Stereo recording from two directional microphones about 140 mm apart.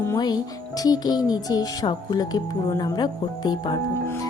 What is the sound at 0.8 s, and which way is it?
Speech, 30° left (ahead or behind).